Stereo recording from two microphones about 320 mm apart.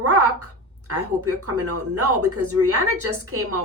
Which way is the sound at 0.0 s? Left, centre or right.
Right.